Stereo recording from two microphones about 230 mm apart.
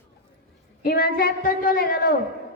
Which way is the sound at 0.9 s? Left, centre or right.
Left.